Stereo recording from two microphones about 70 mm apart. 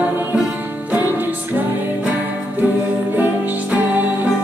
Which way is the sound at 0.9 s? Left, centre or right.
Right.